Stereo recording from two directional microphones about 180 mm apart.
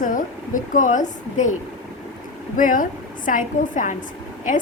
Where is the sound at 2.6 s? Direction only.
50° left (ahead or behind).